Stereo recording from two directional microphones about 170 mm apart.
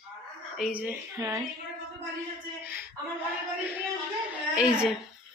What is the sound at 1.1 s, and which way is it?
Speech, 20° right (ahead or behind).